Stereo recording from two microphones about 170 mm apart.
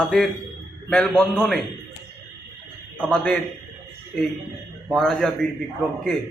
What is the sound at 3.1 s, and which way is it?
Speech, 5° left (ahead or behind).